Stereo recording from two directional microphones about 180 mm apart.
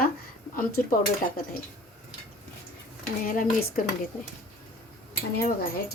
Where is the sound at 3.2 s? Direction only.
55° left (ahead or behind).